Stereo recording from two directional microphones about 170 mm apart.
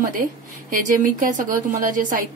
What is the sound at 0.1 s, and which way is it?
A woman's voice, 50° right (ahead or behind).